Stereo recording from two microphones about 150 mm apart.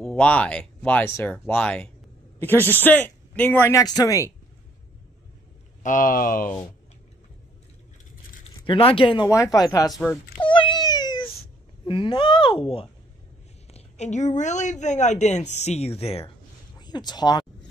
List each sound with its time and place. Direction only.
0.0 s speech: 10° left (ahead or behind); by 4.3 s 25° left (ahead or behind)
5.8 s speech: 65° left (ahead or behind)
8.6 s speech: 35° left (ahead or behind)
9.9 s speech: centre (ahead or behind)
10.4 s a sound: 35° left (ahead or behind)
11.8 s speech: 35° left (ahead or behind)
13.7 s a woman's voice: 50° left (ahead or behind)
16.8 s speech: 30° left (ahead or behind)